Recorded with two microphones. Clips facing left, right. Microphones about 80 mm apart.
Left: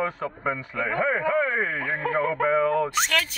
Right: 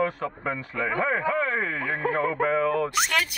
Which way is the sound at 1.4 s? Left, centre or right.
Centre.